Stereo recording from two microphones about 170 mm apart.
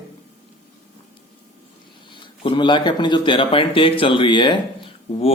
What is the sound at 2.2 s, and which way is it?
A man's voice, 30° left (ahead or behind).